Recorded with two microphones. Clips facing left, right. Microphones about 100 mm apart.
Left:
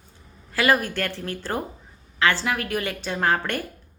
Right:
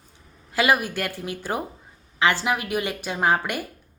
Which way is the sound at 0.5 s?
15° right (ahead or behind).